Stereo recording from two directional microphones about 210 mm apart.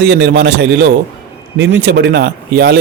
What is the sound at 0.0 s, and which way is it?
Speech, 55° right (ahead or behind).